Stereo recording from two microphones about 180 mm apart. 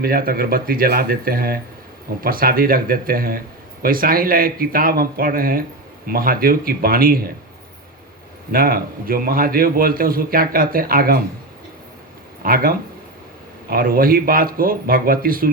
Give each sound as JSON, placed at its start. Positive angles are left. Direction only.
{"t": 0.0, "sound": "a man's voice", "side_deg": -55}
{"t": 8.5, "sound": "a man's voice", "side_deg": -55}
{"t": 12.4, "sound": "a man's voice", "side_deg": -55}